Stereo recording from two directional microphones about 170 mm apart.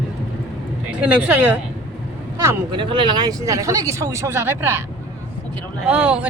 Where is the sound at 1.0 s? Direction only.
10° right (ahead or behind).